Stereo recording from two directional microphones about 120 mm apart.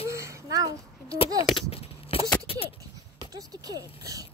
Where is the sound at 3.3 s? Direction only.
30° right (ahead or behind).